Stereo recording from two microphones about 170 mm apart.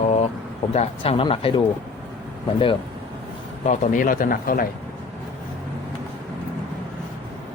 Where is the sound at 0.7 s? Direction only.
35° left (ahead or behind).